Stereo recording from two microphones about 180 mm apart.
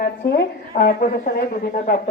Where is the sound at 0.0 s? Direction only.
65° left (ahead or behind).